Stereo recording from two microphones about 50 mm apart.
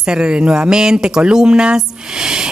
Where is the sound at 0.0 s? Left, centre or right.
Centre.